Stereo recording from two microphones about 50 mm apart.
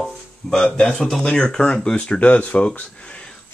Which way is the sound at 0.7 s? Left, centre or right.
Centre.